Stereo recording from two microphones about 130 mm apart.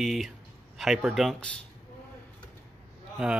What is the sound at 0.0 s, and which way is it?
Speech, centre (ahead or behind).